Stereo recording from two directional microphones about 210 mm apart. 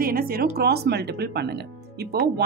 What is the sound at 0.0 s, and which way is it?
Speech, 45° right (ahead or behind).